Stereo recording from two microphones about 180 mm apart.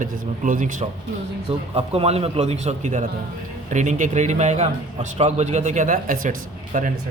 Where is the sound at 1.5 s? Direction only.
30° right (ahead or behind).